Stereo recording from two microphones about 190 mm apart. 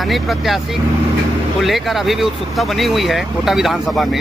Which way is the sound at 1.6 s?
Centre (ahead or behind).